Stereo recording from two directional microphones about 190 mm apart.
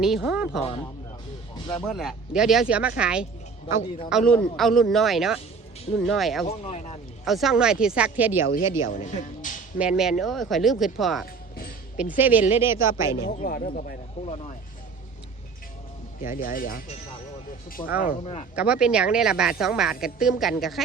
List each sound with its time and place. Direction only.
0.0 s speech: centre (ahead or behind)
1.7 s speech: 5° left (ahead or behind)
6.5 s speech: 35° left (ahead or behind)
7.3 s speech: centre (ahead or behind)
8.8 s speech: 40° left (ahead or behind)
9.7 s a woman's voice: 5° right (ahead or behind)
13.1 s speech: 25° left (ahead or behind)
13.4 s speech: 50° left (ahead or behind)
14.2 s speech: 35° left (ahead or behind)
16.2 s speech: 45° left (ahead or behind)
17.8 s speech: 25° left (ahead or behind)
18.5 s speech: 5° right (ahead or behind)